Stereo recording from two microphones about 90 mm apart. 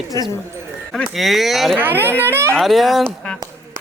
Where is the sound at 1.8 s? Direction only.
25° right (ahead or behind).